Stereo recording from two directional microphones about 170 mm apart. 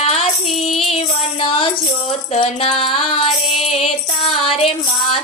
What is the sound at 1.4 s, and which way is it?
Music, 30° left (ahead or behind).